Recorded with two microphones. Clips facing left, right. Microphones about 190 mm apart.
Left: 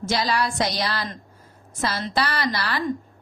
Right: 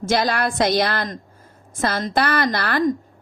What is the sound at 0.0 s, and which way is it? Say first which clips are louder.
Speech: right 3 dB; 50° right (ahead or behind).